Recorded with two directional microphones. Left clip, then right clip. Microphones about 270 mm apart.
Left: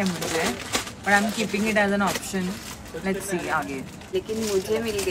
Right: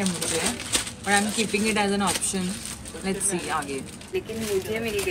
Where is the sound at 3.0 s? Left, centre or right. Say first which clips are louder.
Left 1 dB; centre.